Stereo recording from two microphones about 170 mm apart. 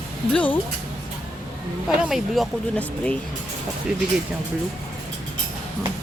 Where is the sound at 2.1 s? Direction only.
Centre (ahead or behind).